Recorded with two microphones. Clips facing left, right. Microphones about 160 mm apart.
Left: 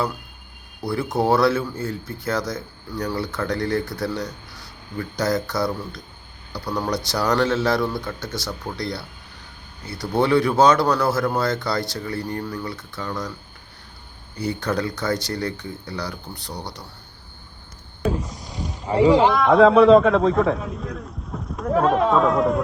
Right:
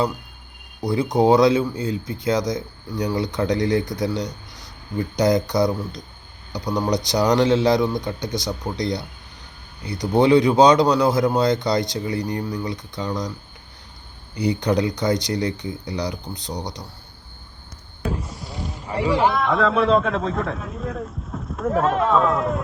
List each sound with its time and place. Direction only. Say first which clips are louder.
0.8 s speech: right 4 dB; 20° right (ahead or behind)
14.3 s speech: right 4 dB; 15° right (ahead or behind)
18.9 s a man's voice: left 5 dB; 10° left (ahead or behind)
19.3 s a man's voice: left 6 dB; centre (ahead or behind)